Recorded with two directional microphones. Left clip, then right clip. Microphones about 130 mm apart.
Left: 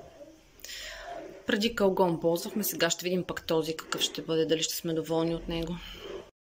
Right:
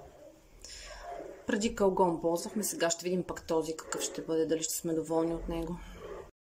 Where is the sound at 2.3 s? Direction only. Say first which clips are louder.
Left 3 dB; 25° left (ahead or behind).